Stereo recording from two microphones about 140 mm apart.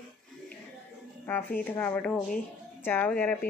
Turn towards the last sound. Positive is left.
turn(degrees=10)  # may be behind; listen again after turning